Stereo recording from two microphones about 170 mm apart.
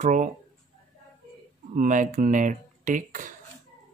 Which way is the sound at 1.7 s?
50° right (ahead or behind).